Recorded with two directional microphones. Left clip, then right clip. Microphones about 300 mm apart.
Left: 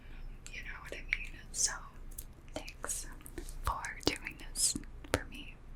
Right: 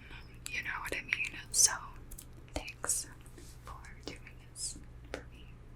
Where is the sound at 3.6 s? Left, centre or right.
Left.